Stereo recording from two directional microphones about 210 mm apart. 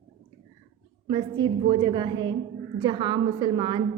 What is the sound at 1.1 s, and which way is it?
A woman's voice, 20° right (ahead or behind).